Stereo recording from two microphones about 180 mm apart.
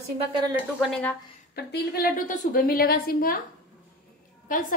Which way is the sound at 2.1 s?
45° left (ahead or behind).